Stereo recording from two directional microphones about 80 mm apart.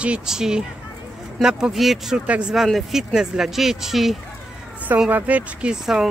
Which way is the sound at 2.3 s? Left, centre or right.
Centre.